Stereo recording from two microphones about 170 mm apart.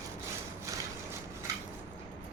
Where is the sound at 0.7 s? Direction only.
20° right (ahead or behind).